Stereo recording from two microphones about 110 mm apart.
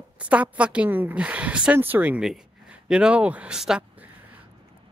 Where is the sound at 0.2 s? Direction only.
10° right (ahead or behind).